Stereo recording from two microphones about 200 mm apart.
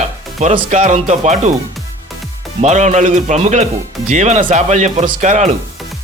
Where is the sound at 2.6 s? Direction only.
35° right (ahead or behind).